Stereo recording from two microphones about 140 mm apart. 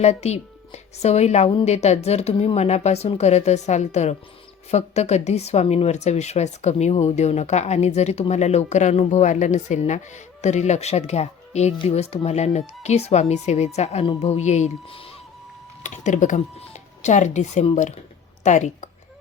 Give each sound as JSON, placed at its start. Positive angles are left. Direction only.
{"t": 0.0, "sound": "a woman's voice", "side_deg": 50}
{"t": 14.8, "sound": "speech", "side_deg": 40}
{"t": 15.8, "sound": "speech", "side_deg": 60}